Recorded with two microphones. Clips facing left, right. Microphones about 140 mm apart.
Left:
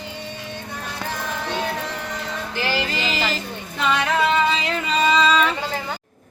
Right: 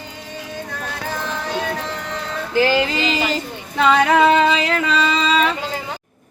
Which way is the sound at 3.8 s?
85° right.